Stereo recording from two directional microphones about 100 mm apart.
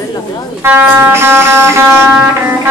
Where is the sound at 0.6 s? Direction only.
20° right (ahead or behind).